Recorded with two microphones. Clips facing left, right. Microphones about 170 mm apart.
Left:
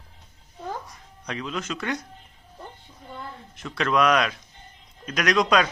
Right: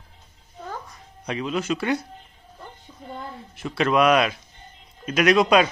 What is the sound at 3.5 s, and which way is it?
Speech, 10° right (ahead or behind).